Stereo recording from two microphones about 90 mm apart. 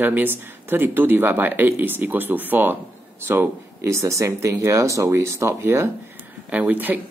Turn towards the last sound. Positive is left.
turn(degrees=-20)  # may be behind; listen again after turning